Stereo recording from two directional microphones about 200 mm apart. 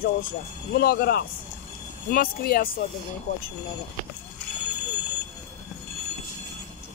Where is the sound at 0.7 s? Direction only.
50° left (ahead or behind).